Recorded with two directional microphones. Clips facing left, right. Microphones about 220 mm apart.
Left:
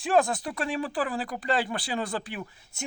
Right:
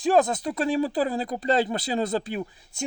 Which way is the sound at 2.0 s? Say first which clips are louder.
Right 6 dB; 25° right (ahead or behind).